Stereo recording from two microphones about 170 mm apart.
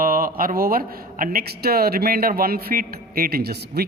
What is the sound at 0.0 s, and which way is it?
A man's voice, 55° right (ahead or behind).